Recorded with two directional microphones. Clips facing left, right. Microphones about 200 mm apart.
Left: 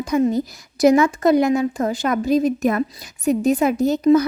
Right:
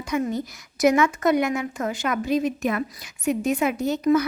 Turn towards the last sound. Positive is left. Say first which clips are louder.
# left 5 dB
turn(degrees=35)  # may be behind; listen again after turning